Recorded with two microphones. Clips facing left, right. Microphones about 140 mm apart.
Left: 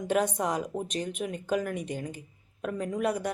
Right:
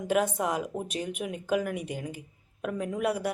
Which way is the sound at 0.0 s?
5° right (ahead or behind).